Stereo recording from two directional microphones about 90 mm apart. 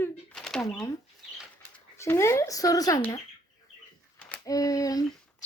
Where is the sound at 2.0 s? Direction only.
30° left (ahead or behind).